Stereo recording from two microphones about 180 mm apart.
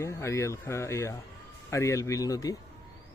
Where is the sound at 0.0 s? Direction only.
15° left (ahead or behind).